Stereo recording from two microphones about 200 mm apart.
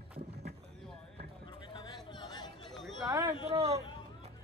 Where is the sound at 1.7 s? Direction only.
25° left (ahead or behind).